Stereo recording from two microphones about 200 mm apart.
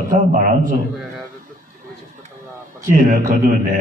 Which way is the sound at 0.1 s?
40° right (ahead or behind).